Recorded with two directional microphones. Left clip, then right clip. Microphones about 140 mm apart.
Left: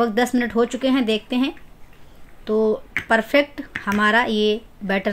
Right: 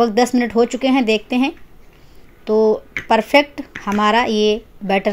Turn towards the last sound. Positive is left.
turn(degrees=-30)  # may be behind; listen again after turning